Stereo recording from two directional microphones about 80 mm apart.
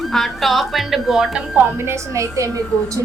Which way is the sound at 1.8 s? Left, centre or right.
Right.